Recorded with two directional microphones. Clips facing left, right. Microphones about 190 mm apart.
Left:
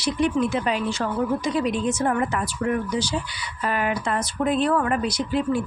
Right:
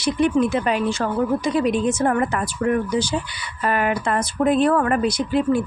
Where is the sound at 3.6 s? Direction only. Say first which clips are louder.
Right 3 dB; 55° right (ahead or behind).